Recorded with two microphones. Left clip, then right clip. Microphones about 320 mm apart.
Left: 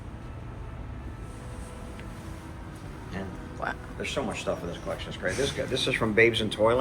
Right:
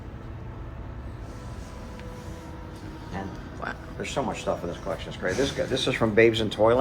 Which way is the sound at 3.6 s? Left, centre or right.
Centre.